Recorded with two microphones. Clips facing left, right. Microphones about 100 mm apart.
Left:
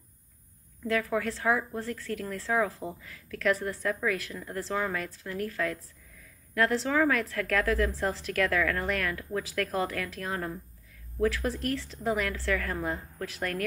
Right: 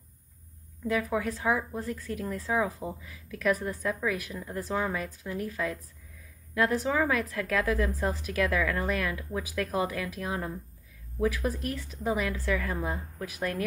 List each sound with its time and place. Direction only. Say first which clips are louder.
0.8 s a woman's voice: even; 15° right (ahead or behind)